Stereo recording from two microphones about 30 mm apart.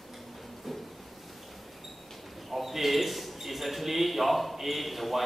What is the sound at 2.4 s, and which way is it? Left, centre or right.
A man's voice, centre.